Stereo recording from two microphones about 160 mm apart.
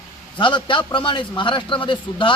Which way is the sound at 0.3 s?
30° left (ahead or behind).